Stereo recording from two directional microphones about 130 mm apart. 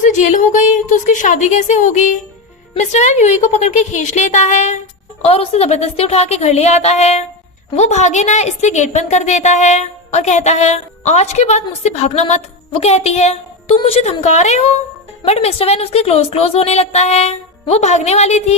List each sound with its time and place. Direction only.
0.0 s music: 75° left (ahead or behind)
1.0 s a woman's voice: 75° left (ahead or behind)
5.2 s a woman's voice: 50° left (ahead or behind)